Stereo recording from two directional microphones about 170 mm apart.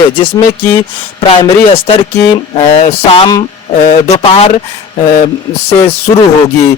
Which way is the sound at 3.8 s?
40° left (ahead or behind).